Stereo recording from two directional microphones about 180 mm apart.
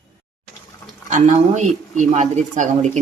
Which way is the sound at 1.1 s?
40° right (ahead or behind).